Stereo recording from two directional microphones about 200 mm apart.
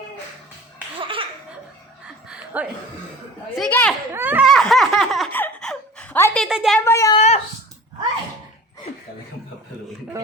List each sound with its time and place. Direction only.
0.9 s laughter: 25° right (ahead or behind)
2.3 s chuckle: 10° right (ahead or behind)
3.5 s a child's voice: 5° left (ahead or behind)
4.1 s speech: 10° right (ahead or behind)
4.5 s baby laughter: centre (ahead or behind)
6.7 s a woman's voice: 15° left (ahead or behind)
7.2 s speech: 35° left (ahead or behind)